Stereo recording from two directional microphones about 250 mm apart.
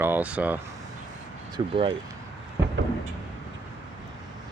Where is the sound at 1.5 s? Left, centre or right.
Right.